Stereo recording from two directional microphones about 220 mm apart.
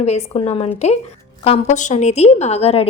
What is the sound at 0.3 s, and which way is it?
A woman's voice, 25° left (ahead or behind).